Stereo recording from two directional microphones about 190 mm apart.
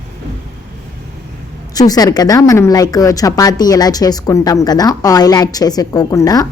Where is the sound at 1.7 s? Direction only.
20° left (ahead or behind).